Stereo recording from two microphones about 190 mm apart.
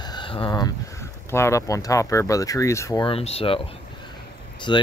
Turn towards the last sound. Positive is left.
turn(degrees=25)  # may be behind; listen again after turning